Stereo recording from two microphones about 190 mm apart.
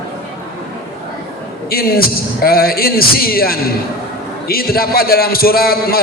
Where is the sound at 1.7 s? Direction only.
50° left (ahead or behind).